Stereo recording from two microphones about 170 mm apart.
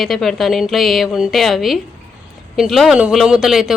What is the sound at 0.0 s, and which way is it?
Speech, centre (ahead or behind).